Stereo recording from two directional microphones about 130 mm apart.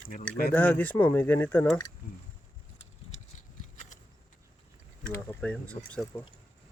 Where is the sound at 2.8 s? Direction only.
65° left (ahead or behind).